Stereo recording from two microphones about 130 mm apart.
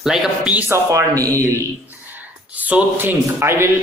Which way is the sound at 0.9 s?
25° right (ahead or behind).